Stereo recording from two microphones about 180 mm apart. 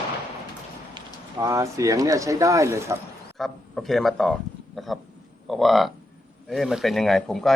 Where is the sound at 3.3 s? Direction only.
Centre (ahead or behind).